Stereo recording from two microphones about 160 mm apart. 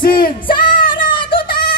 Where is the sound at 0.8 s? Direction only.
30° left (ahead or behind).